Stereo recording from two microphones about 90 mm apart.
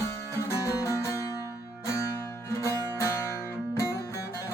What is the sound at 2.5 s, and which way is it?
Music, 35° left (ahead or behind).